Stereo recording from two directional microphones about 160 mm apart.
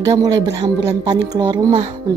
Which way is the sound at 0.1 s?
20° right (ahead or behind).